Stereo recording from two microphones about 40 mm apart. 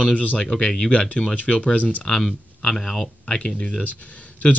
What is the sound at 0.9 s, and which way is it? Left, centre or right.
Speech, left.